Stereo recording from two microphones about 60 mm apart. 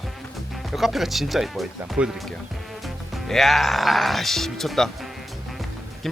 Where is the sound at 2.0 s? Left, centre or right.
Right.